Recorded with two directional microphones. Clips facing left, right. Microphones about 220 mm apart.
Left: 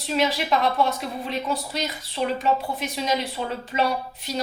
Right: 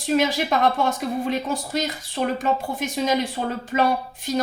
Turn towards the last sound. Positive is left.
turn(degrees=-50)  # may be behind; listen again after turning